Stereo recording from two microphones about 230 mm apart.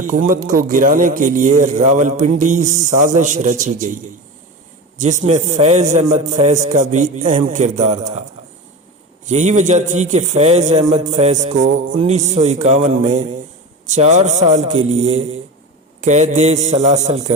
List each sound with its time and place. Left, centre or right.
0.3 s a man's voice: right
5.2 s a man's voice: right
9.2 s a man's voice: right